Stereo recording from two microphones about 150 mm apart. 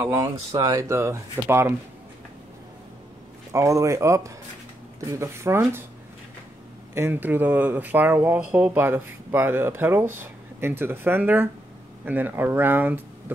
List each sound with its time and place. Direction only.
0.0 s speech: 20° right (ahead or behind)
3.5 s speech: 20° right (ahead or behind)
6.9 s speech: 15° right (ahead or behind)